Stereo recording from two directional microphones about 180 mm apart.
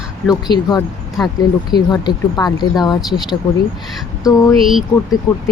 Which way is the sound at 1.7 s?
25° left (ahead or behind).